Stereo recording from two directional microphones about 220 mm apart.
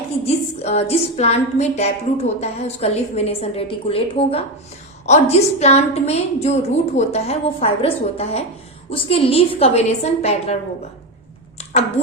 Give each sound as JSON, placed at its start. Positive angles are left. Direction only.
{"t": 0.3, "sound": "a woman's voice", "side_deg": 30}